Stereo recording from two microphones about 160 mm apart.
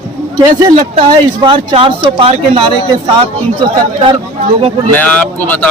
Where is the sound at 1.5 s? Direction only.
35° right (ahead or behind).